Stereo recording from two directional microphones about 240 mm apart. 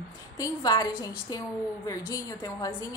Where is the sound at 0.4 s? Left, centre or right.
Centre.